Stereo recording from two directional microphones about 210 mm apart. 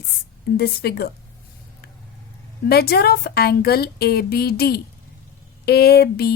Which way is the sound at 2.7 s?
50° left (ahead or behind).